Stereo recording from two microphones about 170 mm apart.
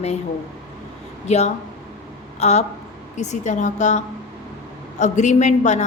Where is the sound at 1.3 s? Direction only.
40° left (ahead or behind).